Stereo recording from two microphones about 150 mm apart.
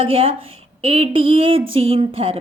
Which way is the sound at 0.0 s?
35° right (ahead or behind).